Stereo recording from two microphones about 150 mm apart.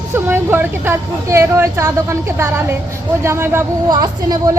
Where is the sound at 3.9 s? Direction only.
25° right (ahead or behind).